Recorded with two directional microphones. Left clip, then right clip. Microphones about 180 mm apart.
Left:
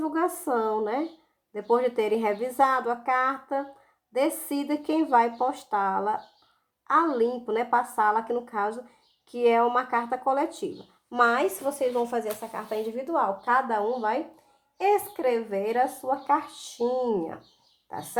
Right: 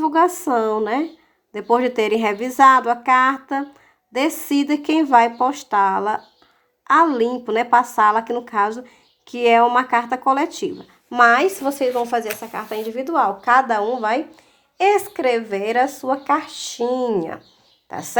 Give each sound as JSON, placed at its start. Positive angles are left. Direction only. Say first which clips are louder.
{"t": 0.0, "sound": "speech", "louder": "right 11 dB", "side_deg": -25}
{"t": 12.4, "sound": "a woman's voice", "louder": "right 5 dB", "side_deg": -35}